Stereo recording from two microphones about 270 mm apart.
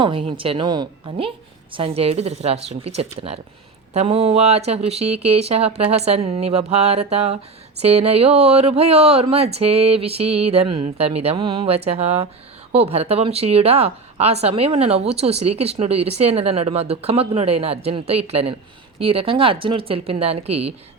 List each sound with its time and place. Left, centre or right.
0.0 s a woman's voice: centre